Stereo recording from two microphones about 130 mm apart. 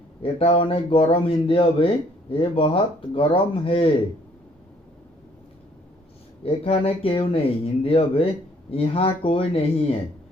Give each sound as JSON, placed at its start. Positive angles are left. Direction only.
{"t": 0.2, "sound": "speech", "side_deg": 45}
{"t": 6.4, "sound": "speech", "side_deg": 45}